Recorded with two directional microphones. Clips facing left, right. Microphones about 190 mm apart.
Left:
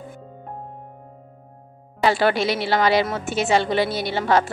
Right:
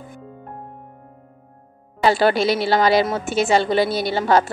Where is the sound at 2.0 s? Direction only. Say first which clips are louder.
Right 3 dB; 35° right (ahead or behind).